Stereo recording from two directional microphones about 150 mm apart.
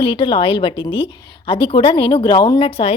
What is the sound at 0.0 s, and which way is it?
A woman's voice, 35° left (ahead or behind).